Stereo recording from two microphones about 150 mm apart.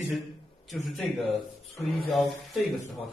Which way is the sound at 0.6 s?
Centre (ahead or behind).